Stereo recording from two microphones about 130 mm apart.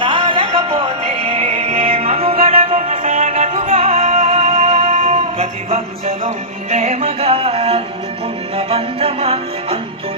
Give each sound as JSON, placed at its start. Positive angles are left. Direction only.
{"t": 0.0, "sound": "music", "side_deg": -40}
{"t": 3.2, "sound": "music", "side_deg": -70}
{"t": 3.8, "sound": "music", "side_deg": -50}